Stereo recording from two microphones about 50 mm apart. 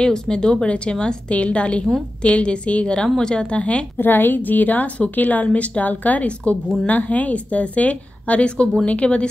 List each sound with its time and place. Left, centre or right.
0.0 s a woman's voice: centre
4.0 s a woman's voice: left